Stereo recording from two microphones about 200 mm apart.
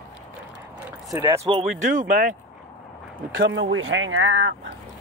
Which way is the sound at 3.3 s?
65° right (ahead or behind).